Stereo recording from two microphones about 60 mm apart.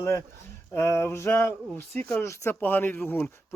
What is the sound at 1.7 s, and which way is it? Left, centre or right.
Speech, left.